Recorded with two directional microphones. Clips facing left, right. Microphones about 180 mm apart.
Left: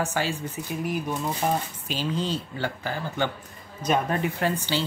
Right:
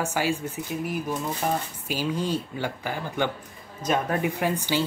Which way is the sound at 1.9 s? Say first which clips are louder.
Right 2 dB; 10° right (ahead or behind).